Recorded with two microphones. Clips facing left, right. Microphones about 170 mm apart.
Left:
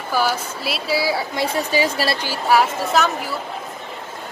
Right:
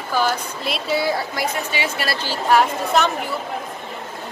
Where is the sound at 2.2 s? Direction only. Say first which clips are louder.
Right 2 dB; 10° left (ahead or behind).